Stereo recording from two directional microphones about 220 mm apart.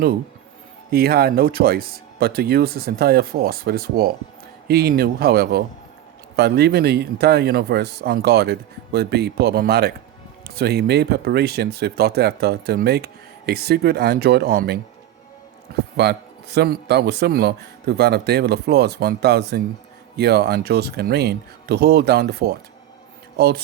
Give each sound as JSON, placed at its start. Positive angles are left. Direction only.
{"t": 0.9, "sound": "speech", "side_deg": -45}
{"t": 16.0, "sound": "speech", "side_deg": -50}